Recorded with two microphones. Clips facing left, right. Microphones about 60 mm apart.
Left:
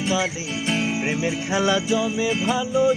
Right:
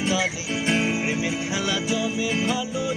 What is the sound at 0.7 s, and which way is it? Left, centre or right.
Music, right.